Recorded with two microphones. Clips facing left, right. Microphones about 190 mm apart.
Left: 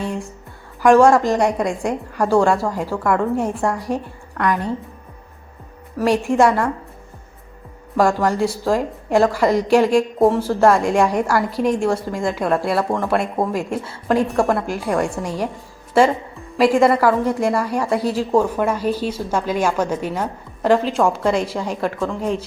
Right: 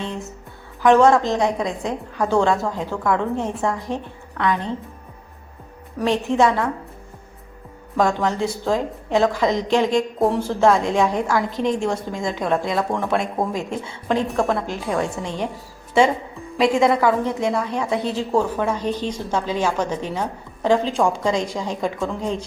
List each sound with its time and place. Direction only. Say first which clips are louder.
0.0 s a woman's voice: left 3 dB; 10° left (ahead or behind)
6.0 s a woman's voice: left 3 dB; 10° left (ahead or behind)
7.9 s a woman's voice: left 3 dB; 10° left (ahead or behind)
16.6 s a woman's voice: left 3 dB; 5° left (ahead or behind)